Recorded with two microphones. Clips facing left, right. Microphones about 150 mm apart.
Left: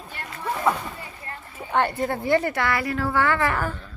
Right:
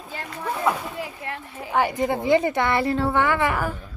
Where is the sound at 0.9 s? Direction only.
85° right.